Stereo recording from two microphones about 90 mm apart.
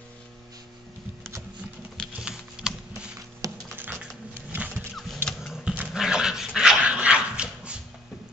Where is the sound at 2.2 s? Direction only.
5° right (ahead or behind).